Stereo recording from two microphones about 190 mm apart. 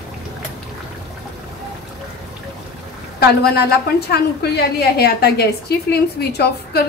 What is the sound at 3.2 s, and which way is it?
A woman's voice, 55° left (ahead or behind).